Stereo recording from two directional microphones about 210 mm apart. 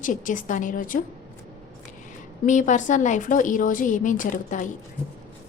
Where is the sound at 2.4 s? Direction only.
35° left (ahead or behind).